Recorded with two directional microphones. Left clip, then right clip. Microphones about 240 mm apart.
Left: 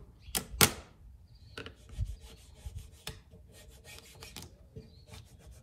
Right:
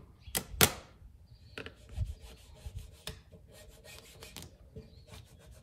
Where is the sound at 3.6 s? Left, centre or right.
Centre.